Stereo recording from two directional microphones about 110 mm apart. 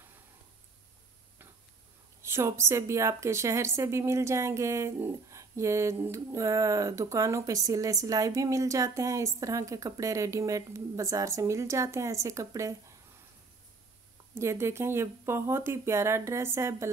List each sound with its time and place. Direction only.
2.2 s a woman's voice: 25° right (ahead or behind)
14.3 s a woman's voice: 25° right (ahead or behind)